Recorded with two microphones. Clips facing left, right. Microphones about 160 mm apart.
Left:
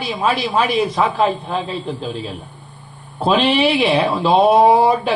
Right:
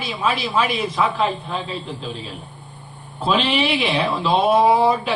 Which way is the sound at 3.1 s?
40° left (ahead or behind).